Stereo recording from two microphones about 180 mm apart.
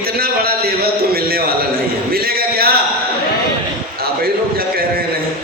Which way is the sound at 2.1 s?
55° right (ahead or behind).